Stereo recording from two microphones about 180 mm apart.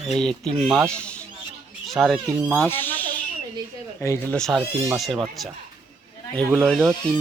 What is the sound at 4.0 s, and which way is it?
Speech, 15° left (ahead or behind).